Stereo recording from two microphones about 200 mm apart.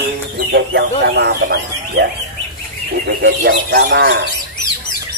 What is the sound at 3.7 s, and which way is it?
Speech, 60° right (ahead or behind).